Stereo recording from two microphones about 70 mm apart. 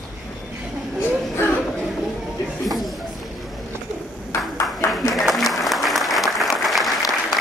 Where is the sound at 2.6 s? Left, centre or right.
Centre.